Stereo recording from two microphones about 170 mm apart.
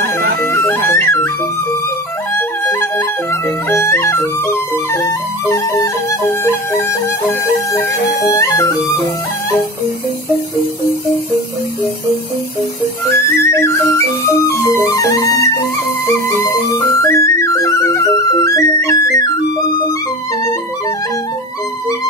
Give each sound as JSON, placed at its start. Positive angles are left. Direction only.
{"t": 0.4, "sound": "music", "side_deg": 10}
{"t": 2.3, "sound": "music", "side_deg": 15}
{"t": 8.3, "sound": "music", "side_deg": 20}
{"t": 13.4, "sound": "music", "side_deg": 15}